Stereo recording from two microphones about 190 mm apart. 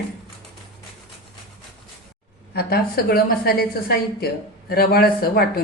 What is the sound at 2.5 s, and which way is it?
A woman's voice, 55° left (ahead or behind).